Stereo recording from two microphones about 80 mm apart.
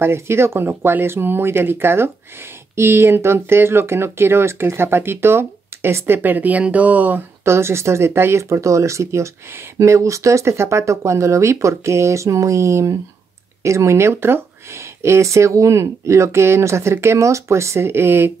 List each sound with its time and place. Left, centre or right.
0.0 s speech: right
7.4 s speech: right